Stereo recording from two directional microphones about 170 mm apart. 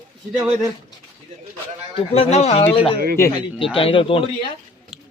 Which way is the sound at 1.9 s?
35° left (ahead or behind).